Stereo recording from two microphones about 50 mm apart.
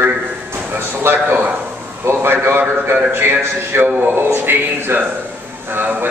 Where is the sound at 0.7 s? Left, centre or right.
Right.